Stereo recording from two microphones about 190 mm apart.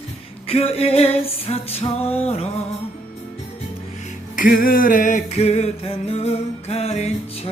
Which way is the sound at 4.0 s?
40° left (ahead or behind).